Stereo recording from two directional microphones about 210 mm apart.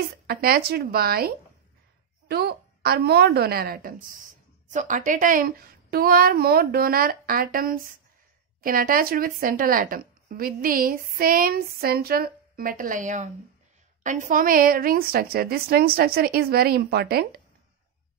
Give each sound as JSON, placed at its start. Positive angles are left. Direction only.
{"t": 0.3, "sound": "a woman's voice", "side_deg": -45}